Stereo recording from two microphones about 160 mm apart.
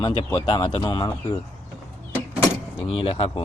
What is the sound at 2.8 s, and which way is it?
Speech, 35° left (ahead or behind).